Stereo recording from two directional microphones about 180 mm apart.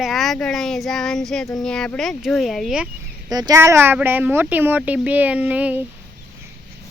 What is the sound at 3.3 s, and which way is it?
Speech, 20° right (ahead or behind).